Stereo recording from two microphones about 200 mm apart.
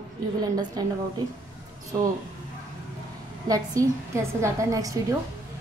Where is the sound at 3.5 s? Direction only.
15° right (ahead or behind).